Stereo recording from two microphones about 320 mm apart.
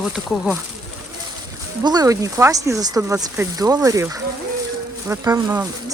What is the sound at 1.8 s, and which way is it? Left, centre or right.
Speech, centre.